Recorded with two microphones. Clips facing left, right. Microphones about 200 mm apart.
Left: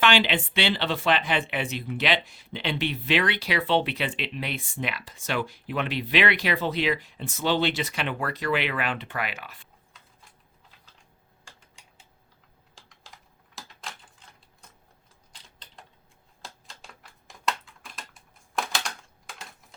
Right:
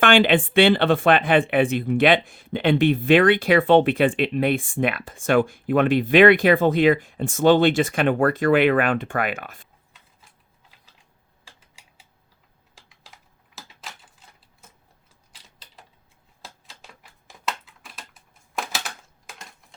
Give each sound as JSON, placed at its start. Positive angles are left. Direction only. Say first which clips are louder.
{"t": 0.0, "sound": "speech", "louder": "right 7 dB", "side_deg": -50}
{"t": 11.4, "sound": "typing", "louder": "even", "side_deg": -5}